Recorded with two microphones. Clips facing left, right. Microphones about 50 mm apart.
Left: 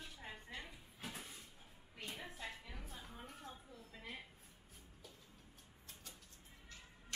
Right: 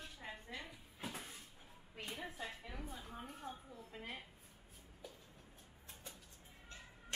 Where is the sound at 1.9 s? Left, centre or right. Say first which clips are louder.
Right 3 dB; right.